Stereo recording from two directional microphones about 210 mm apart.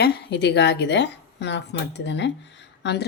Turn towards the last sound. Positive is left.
turn(degrees=55)  # may be behind; listen again after turning